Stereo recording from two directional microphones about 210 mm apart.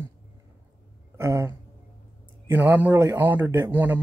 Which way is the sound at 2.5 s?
10° right (ahead or behind).